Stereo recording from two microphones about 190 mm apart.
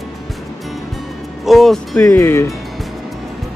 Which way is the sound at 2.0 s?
15° left (ahead or behind).